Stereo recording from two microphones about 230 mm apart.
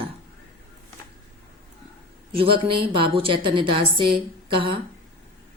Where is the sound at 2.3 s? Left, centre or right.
Right.